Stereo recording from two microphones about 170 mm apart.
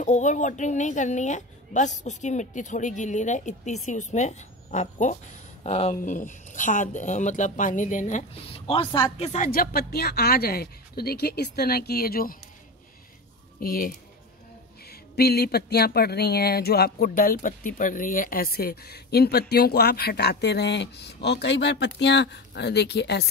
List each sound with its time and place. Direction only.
0.0 s a woman's voice: 45° left (ahead or behind); by 9.3 s 30° left (ahead or behind)
9.5 s a woman's voice: 60° left (ahead or behind)
13.6 s a woman's voice: 55° left (ahead or behind); by 23.2 s 80° left